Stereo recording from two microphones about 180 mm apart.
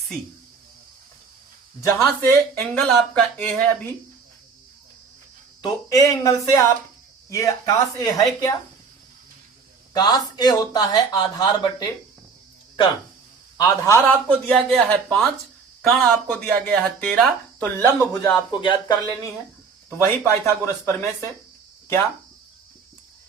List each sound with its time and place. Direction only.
2.0 s speech: 5° left (ahead or behind)
5.6 s speech: 20° left (ahead or behind)
9.9 s speech: 20° left (ahead or behind)
13.6 s speech: 15° left (ahead or behind)